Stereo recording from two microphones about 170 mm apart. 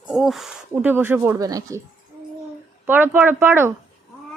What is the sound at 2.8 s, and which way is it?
Speech, 10° right (ahead or behind).